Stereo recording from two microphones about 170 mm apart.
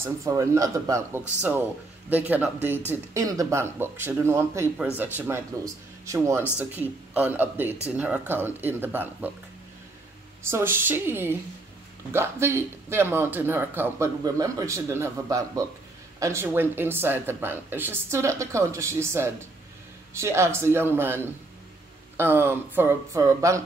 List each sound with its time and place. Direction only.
0.0 s speech: 20° right (ahead or behind)
10.5 s speech: 15° right (ahead or behind)